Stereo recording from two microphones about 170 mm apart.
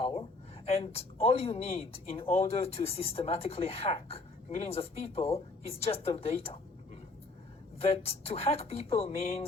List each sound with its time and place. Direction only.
0.6 s speech: 35° left (ahead or behind)
7.8 s speech: 35° left (ahead or behind)